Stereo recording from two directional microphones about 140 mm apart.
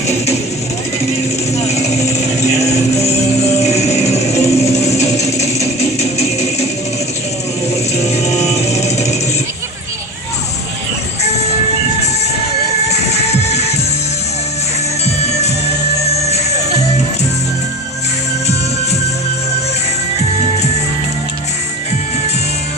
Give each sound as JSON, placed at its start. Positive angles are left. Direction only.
{"t": 1.5, "sound": "vehicle", "side_deg": 50}
{"t": 2.6, "sound": "music", "side_deg": 50}
{"t": 4.9, "sound": "a sound", "side_deg": 50}
{"t": 8.0, "sound": "music", "side_deg": 50}
{"t": 12.9, "sound": "music", "side_deg": 50}
{"t": 15.0, "sound": "music", "side_deg": 50}